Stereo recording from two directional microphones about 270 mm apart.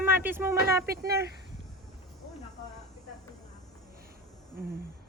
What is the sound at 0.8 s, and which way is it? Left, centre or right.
Speech, right.